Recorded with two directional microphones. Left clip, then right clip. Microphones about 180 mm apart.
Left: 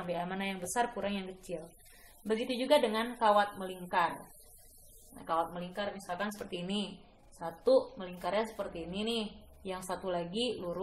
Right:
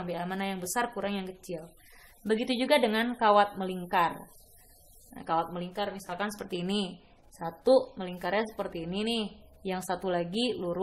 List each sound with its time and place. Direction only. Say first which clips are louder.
0.0 s a woman's voice: right 2 dB; 35° right (ahead or behind)
2.4 s a woman's voice: right 2 dB; 45° right (ahead or behind)
5.1 s a woman's voice: right 3 dB; 45° right (ahead or behind)